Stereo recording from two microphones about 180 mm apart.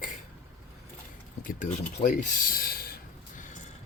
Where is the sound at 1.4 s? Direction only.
50° left (ahead or behind).